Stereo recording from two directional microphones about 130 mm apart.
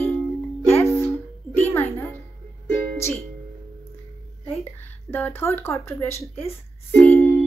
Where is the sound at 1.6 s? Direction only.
15° left (ahead or behind).